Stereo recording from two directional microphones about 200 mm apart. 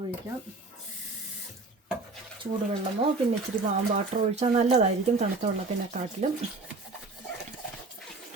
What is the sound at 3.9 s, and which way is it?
Speech, 35° right (ahead or behind).